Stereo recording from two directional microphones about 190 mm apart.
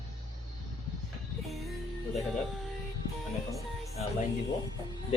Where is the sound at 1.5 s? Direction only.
Centre (ahead or behind).